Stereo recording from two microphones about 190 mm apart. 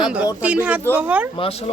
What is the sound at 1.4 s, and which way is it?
Speech, 30° left (ahead or behind).